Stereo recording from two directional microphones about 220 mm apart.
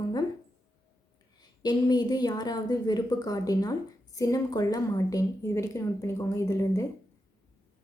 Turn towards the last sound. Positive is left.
turn(degrees=15)  # may be behind; listen again after turning